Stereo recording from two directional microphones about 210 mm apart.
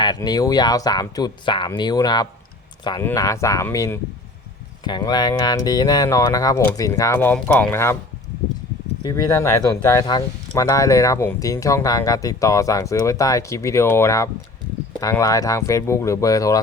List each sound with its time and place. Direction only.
0.0 s speech: 20° left (ahead or behind)
9.0 s speech: 15° left (ahead or behind)